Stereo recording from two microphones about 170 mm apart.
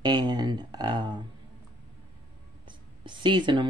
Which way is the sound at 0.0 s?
25° right (ahead or behind).